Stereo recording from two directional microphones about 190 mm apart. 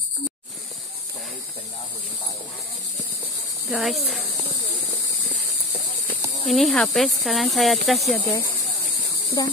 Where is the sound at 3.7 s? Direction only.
Centre (ahead or behind).